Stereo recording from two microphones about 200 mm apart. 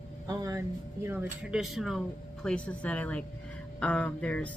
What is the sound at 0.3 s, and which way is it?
Speech, 15° right (ahead or behind).